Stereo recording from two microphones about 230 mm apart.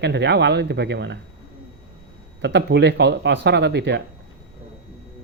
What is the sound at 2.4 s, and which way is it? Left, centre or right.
Speech, right.